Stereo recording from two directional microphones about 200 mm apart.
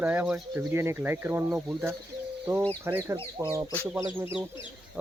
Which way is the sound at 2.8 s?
10° right (ahead or behind).